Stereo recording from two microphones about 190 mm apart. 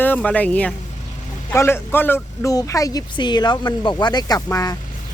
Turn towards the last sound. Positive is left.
turn(degrees=20)  # may be behind; listen again after turning